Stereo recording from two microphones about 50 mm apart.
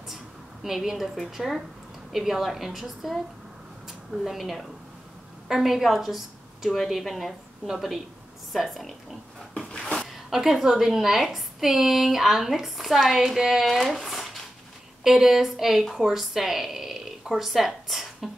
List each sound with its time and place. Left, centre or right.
0.1 s a woman's voice: centre
4.2 s a woman's voice: centre
9.7 s a sound: centre
10.3 s a woman's voice: centre